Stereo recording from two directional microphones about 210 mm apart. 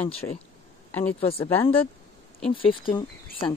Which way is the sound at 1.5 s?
10° left (ahead or behind).